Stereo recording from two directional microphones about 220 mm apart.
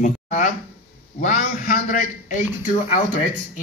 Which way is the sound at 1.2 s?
35° left (ahead or behind).